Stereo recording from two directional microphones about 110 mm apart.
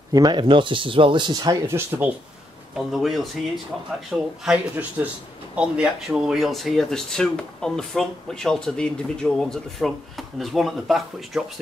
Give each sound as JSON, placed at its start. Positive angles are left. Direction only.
{"t": 0.1, "sound": "speech", "side_deg": -40}
{"t": 1.7, "sound": "speech", "side_deg": -20}
{"t": 2.9, "sound": "speech", "side_deg": 0}
{"t": 4.1, "sound": "speech", "side_deg": -10}